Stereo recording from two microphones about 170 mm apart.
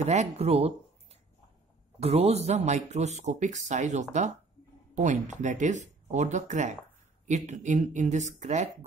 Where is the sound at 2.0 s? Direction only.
40° right (ahead or behind).